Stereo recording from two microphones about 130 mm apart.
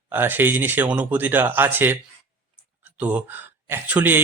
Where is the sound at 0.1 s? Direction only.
15° right (ahead or behind).